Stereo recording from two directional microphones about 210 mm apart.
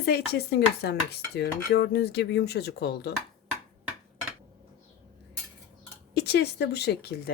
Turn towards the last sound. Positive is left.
turn(degrees=50)  # may be behind; listen again after turning